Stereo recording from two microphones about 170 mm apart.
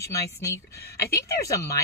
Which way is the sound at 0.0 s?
15° left (ahead or behind).